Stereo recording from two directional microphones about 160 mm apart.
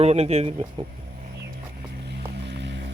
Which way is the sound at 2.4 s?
90° right.